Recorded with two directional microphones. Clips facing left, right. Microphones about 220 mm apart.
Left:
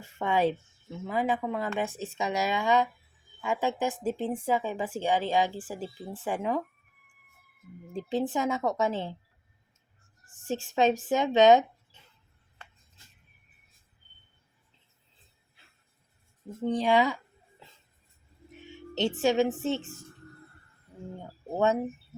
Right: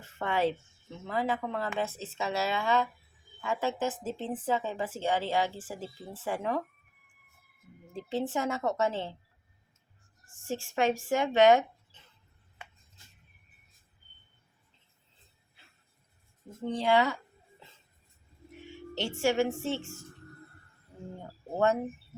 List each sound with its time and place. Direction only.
0.0 s a woman's voice: 15° left (ahead or behind)
7.9 s a woman's voice: 15° left (ahead or behind)
10.4 s speech: 20° left (ahead or behind)
16.6 s a woman's voice: 15° left (ahead or behind)
18.7 s a woman's voice: 20° left (ahead or behind)